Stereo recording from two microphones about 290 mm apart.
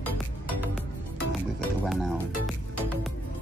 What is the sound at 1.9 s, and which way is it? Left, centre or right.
Speech, centre.